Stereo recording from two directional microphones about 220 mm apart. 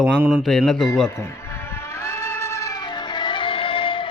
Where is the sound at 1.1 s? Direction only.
10° left (ahead or behind).